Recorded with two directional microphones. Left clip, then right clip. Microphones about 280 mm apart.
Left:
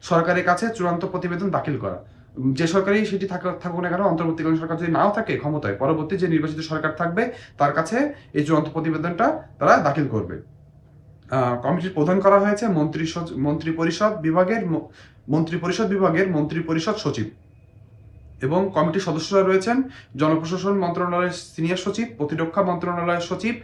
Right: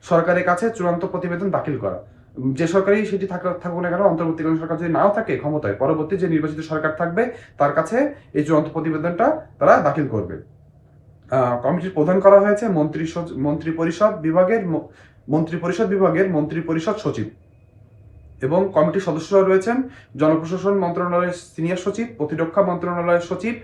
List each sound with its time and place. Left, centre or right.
0.0 s speech: centre
11.3 s speech: centre
18.3 s speech: centre